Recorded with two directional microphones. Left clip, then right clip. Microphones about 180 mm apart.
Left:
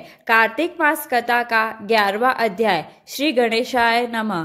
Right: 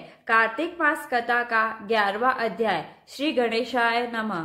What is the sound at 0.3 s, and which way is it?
A woman's voice, 45° left (ahead or behind).